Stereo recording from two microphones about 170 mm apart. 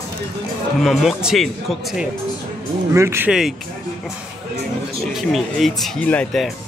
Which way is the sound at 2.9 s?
15° right (ahead or behind).